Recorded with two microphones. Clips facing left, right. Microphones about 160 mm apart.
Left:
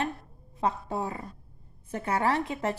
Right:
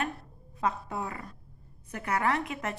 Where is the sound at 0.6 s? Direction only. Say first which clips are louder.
Left 2 dB; 30° left (ahead or behind).